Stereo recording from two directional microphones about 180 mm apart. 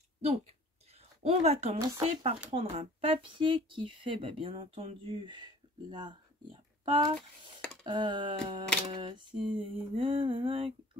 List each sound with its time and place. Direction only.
1.2 s speech: 35° right (ahead or behind)